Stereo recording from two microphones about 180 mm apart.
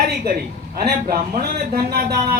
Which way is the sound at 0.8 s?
55° right (ahead or behind).